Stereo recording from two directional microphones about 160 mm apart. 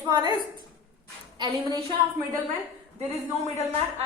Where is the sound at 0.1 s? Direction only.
25° right (ahead or behind).